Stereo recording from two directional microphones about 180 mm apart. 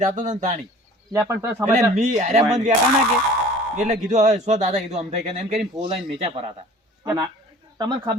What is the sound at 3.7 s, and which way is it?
A man's voice, 40° right (ahead or behind).